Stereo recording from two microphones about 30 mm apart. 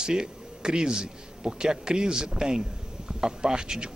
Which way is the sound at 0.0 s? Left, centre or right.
Right.